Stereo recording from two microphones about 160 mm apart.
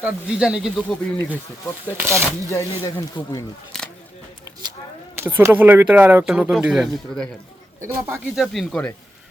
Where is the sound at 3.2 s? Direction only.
30° left (ahead or behind).